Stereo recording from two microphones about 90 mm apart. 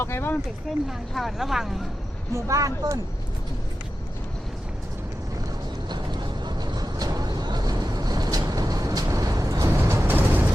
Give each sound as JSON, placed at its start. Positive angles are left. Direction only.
{"t": 0.0, "sound": "speech", "side_deg": 25}
{"t": 0.9, "sound": "speech", "side_deg": 0}
{"t": 2.3, "sound": "speech", "side_deg": -35}
{"t": 5.9, "sound": "vehicle", "side_deg": -55}
{"t": 9.7, "sound": "music", "side_deg": -30}